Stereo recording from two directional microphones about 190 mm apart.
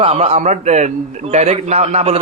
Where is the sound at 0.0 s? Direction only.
35° right (ahead or behind).